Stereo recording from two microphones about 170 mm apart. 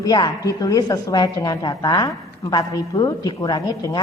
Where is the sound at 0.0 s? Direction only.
20° left (ahead or behind).